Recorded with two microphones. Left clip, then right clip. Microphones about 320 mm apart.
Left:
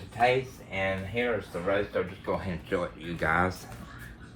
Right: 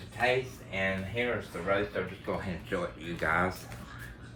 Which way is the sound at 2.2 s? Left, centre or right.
Left.